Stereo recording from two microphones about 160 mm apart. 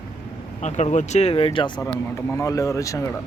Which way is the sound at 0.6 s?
45° left (ahead or behind).